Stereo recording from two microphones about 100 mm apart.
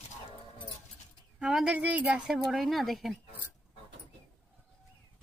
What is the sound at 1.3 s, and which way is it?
A woman's voice, 5° right (ahead or behind).